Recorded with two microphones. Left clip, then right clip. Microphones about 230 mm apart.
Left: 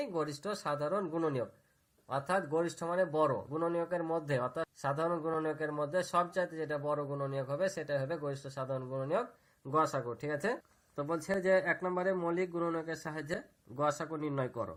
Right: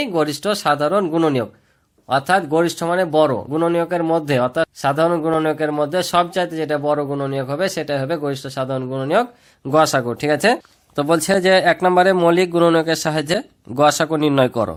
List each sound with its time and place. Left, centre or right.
0.0 s speech: right
9.7 s speech: right